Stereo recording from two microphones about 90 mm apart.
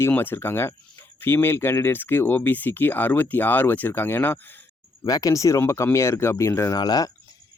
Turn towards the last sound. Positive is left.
turn(degrees=50)  # may be behind; listen again after turning